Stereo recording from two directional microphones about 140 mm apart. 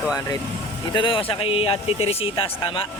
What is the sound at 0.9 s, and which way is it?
Speech, 35° left (ahead or behind).